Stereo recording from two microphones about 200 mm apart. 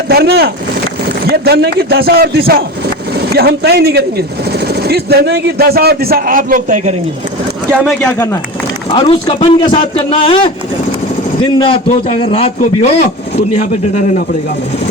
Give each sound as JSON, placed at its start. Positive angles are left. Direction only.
{"t": 0.1, "sound": "speech", "side_deg": -55}
{"t": 7.7, "sound": "speech", "side_deg": 5}
{"t": 8.9, "sound": "a man's voice", "side_deg": 25}
{"t": 11.5, "sound": "a man's voice", "side_deg": 25}